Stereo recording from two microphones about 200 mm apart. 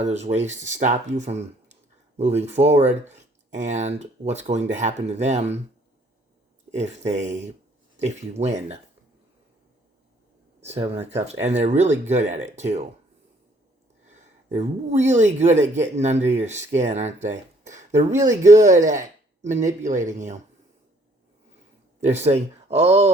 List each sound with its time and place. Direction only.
0.3 s speech: 35° right (ahead or behind)
6.7 s speech: 35° right (ahead or behind)
10.8 s speech: 15° right (ahead or behind)
11.3 s speech: 35° right (ahead or behind)
14.1 s speech: 35° right (ahead or behind)
18.1 s speech: 15° right (ahead or behind)
18.6 s speech: 40° right (ahead or behind)
22.0 s speech: 35° right (ahead or behind)